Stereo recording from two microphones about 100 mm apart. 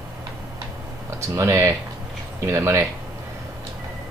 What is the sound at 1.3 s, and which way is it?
Speech, 30° right (ahead or behind).